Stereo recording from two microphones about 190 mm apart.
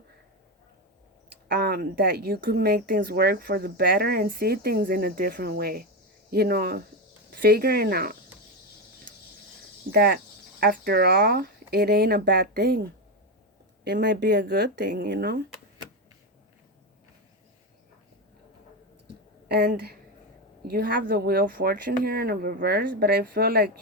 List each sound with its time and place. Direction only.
1.3 s speech: 55° right (ahead or behind)
9.9 s speech: 50° right (ahead or behind)
19.5 s speech: 60° right (ahead or behind)